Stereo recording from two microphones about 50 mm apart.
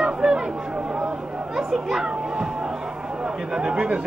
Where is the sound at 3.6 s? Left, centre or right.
Right.